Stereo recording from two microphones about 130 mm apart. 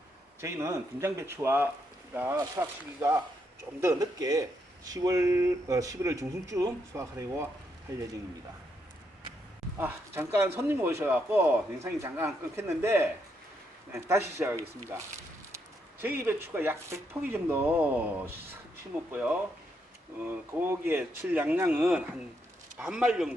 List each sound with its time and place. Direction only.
0.4 s speech: 20° right (ahead or behind)
9.8 s speech: 15° right (ahead or behind)
15.5 s speech: 15° right (ahead or behind)
19.1 s speech: 15° right (ahead or behind)